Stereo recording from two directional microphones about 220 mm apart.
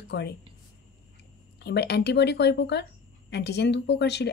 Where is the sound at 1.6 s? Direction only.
50° left (ahead or behind).